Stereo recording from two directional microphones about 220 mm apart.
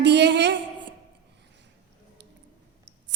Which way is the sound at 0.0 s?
50° right (ahead or behind).